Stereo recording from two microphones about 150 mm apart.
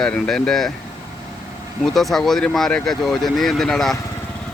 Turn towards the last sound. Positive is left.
turn(degrees=0)  # may be behind; listen again after turning